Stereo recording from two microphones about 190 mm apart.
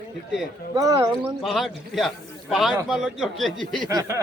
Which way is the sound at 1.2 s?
Centre (ahead or behind).